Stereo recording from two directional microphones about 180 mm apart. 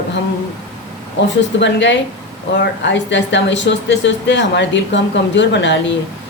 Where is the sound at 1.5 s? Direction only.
80° left.